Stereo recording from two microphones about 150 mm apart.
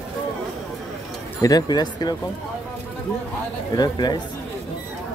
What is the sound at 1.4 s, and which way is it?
Speech, 25° left (ahead or behind).